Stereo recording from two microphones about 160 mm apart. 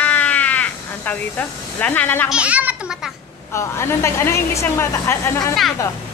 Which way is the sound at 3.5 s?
15° left (ahead or behind).